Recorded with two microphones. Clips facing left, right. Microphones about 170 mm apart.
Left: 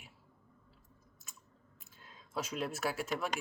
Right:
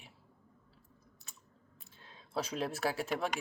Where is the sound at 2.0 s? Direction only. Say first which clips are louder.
Right 2 dB; 35° right (ahead or behind).